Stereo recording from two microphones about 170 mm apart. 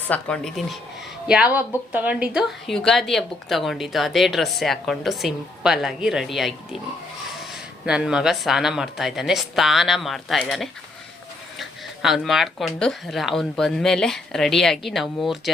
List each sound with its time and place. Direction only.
0.1 s a woman's voice: 5° left (ahead or behind)
7.9 s a woman's voice: 5° right (ahead or behind)